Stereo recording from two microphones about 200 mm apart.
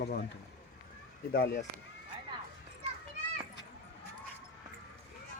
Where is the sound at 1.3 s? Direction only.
50° left (ahead or behind).